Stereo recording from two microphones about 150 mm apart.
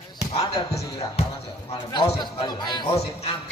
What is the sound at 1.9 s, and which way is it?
Speech, 30° left (ahead or behind).